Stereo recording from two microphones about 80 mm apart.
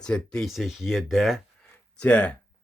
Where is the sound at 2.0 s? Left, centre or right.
Centre.